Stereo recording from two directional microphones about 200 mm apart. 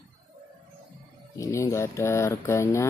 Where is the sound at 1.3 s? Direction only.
15° left (ahead or behind).